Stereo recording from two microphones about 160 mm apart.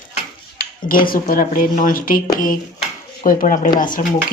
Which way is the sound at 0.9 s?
65° left (ahead or behind).